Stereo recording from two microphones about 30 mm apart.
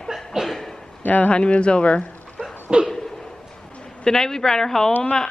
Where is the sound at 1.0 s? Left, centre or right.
Left.